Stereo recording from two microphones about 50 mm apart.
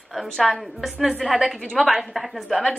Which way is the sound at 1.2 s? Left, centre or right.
Centre.